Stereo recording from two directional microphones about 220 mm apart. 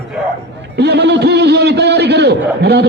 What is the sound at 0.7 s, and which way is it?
Speech, 50° right (ahead or behind).